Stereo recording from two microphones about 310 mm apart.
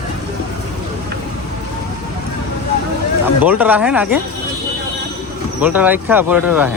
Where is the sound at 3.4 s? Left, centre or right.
Centre.